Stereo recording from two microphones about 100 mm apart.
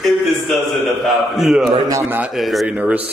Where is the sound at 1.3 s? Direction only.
5° right (ahead or behind).